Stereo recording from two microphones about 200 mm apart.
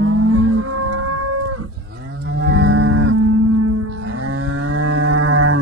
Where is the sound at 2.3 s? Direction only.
85° right.